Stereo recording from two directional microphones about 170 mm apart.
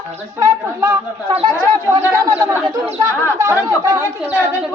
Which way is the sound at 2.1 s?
20° right (ahead or behind).